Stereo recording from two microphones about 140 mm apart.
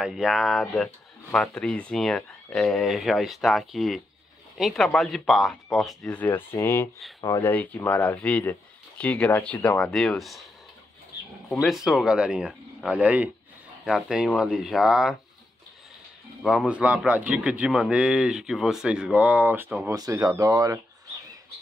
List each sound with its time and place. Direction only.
0.0 s speech: centre (ahead or behind); by 6.9 s 20° left (ahead or behind)
7.2 s speech: 30° left (ahead or behind)
7.4 s speech: 15° left (ahead or behind)
11.6 s a man's voice: centre (ahead or behind)
16.4 s a man's voice: 5° right (ahead or behind)
19.9 s speech: 25° right (ahead or behind)